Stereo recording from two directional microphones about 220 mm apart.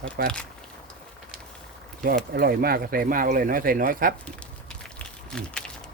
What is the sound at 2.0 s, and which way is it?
Speech, 40° right (ahead or behind).